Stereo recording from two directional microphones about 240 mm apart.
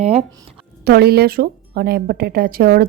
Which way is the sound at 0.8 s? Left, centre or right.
Right.